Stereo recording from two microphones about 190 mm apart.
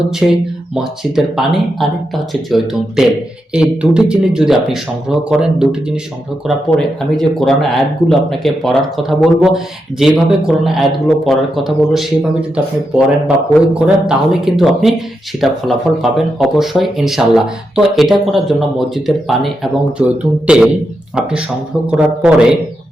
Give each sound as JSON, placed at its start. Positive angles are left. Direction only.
{"t": 0.2, "sound": "speech", "side_deg": -5}
{"t": 6.7, "sound": "speech", "side_deg": 0}